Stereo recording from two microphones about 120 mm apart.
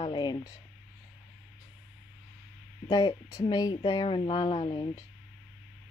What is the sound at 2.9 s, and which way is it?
Speech, 35° left (ahead or behind).